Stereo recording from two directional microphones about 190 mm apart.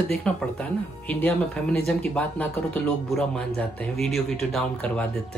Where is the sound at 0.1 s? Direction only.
5° left (ahead or behind).